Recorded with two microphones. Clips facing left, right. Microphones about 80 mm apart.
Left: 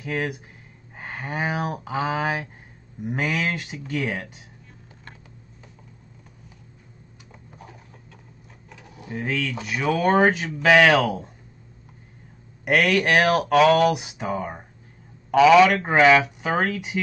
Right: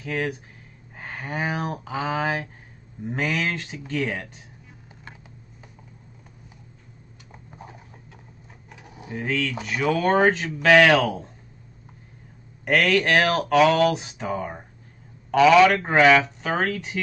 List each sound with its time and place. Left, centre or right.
0.0 s speech: centre
7.5 s a sound: right
9.1 s speech: centre
12.6 s speech: centre